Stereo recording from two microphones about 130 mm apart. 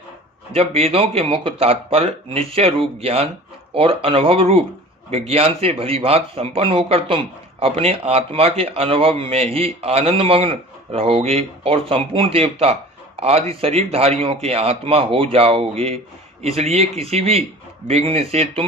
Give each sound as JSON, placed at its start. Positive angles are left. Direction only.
{"t": 0.5, "sound": "speech", "side_deg": -50}